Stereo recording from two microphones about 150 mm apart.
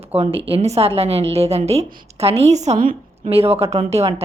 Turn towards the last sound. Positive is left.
turn(degrees=-40)  # may be behind; listen again after turning